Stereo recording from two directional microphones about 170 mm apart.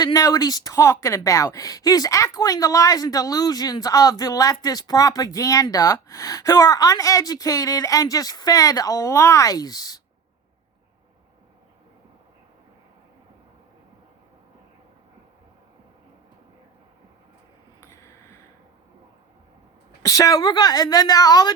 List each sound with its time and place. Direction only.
0.0 s a woman's voice: 20° left (ahead or behind)
17.7 s a sound: 15° left (ahead or behind)
20.0 s a woman's voice: 20° left (ahead or behind)